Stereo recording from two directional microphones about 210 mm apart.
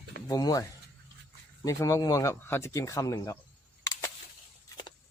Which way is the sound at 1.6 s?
15° left (ahead or behind).